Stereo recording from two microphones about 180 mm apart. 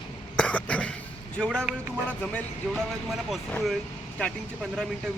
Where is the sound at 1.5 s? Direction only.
5° right (ahead or behind).